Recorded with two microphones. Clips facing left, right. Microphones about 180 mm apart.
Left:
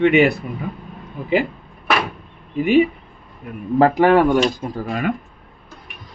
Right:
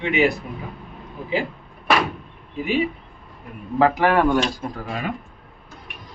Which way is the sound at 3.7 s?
45° left (ahead or behind).